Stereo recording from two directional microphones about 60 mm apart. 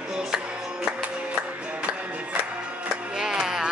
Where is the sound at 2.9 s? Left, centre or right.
Centre.